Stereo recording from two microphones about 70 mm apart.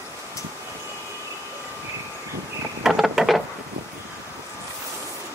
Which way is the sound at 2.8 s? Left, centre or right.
Centre.